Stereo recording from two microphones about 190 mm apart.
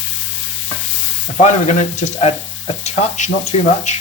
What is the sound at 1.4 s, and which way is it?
Speech, 40° left (ahead or behind).